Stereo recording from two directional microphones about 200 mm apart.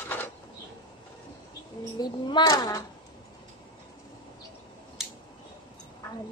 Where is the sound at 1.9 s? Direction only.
20° left (ahead or behind).